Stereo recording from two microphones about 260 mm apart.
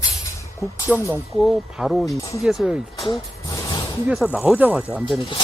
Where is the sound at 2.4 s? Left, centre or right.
Centre.